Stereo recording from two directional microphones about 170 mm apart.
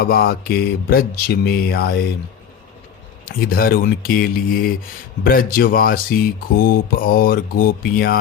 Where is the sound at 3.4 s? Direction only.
60° left (ahead or behind).